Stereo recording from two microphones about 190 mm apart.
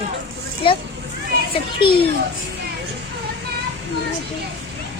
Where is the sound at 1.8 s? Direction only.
25° left (ahead or behind).